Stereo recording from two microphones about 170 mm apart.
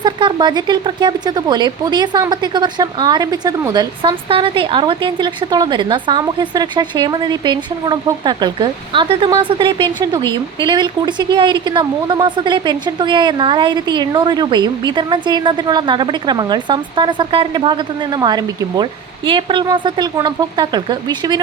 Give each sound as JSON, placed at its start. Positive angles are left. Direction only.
{"t": 0.0, "sound": "speech", "side_deg": -25}